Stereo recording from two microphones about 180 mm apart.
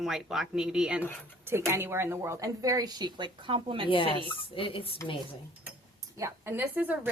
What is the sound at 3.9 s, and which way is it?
A woman's voice, 30° left (ahead or behind).